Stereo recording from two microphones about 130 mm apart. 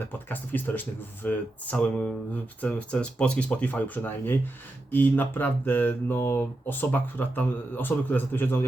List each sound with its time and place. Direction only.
0.3 s speech: 15° left (ahead or behind)